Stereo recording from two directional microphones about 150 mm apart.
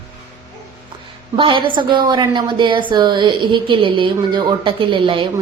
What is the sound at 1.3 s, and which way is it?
A woman's voice, 35° right (ahead or behind).